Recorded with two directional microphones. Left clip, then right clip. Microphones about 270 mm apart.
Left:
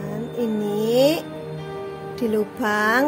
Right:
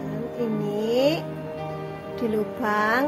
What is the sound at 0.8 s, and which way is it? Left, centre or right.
Music, left.